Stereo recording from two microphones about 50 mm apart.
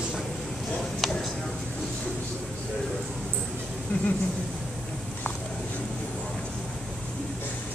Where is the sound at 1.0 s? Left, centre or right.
Centre.